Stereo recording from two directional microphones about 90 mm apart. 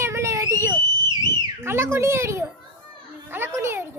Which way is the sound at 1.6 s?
30° right (ahead or behind).